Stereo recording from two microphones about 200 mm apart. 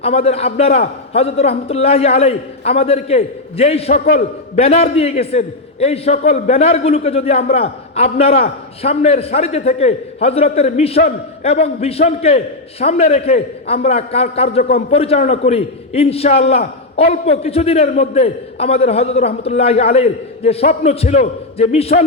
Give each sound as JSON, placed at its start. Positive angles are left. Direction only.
{"t": 0.0, "sound": "a man's voice", "side_deg": 30}